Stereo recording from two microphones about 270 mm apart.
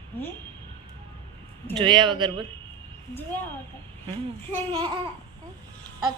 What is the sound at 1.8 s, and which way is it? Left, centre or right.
Speech, centre.